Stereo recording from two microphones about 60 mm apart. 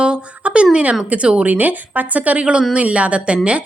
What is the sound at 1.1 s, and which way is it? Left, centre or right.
A woman's voice, centre.